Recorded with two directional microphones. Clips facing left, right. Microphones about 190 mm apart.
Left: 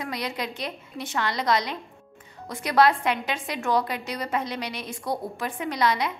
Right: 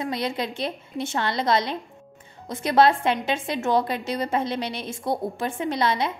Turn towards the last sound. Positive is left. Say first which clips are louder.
# right 1 dB
turn(degrees=-25)  # may be behind; listen again after turning